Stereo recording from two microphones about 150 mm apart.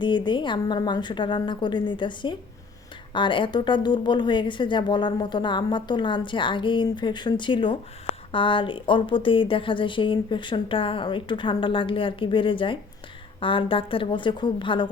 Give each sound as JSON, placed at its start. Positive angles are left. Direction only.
{"t": 0.0, "sound": "a woman's voice", "side_deg": 30}